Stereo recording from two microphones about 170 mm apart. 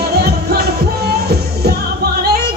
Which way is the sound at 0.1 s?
70° right (ahead or behind).